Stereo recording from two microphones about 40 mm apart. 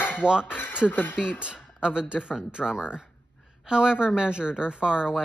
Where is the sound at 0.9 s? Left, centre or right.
Left.